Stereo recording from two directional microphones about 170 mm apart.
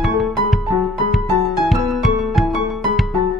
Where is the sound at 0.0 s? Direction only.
Centre (ahead or behind).